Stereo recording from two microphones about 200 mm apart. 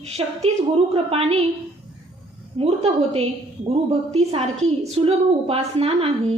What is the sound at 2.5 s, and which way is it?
A woman's voice, 30° right (ahead or behind).